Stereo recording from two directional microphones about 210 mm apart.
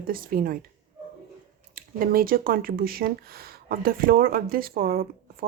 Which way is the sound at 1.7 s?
45° right (ahead or behind).